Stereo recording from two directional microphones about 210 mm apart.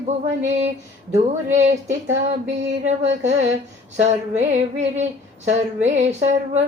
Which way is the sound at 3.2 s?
35° right (ahead or behind).